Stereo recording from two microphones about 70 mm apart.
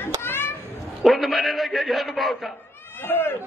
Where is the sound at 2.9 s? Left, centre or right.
Left.